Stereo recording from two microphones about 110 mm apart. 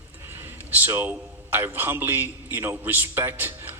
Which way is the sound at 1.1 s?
20° right (ahead or behind).